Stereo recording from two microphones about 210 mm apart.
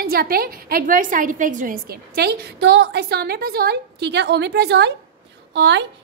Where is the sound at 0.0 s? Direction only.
45° right (ahead or behind).